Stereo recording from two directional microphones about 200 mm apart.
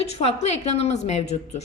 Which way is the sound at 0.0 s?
30° left (ahead or behind).